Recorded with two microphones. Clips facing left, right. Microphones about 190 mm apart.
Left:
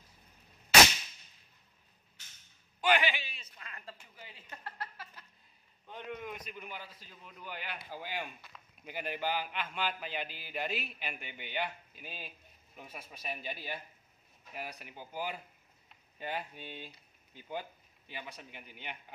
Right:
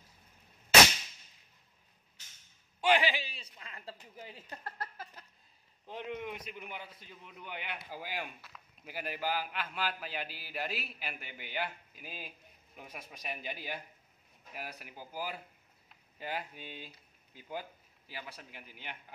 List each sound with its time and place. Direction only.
2.8 s a sound: 30° right (ahead or behind)
5.9 s a man's voice: 30° right (ahead or behind)
6.5 s a man's voice: 15° right (ahead or behind); by 19.1 s centre (ahead or behind)